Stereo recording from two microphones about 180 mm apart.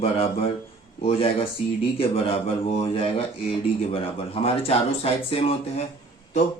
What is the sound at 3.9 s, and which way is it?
Speech, 30° left (ahead or behind).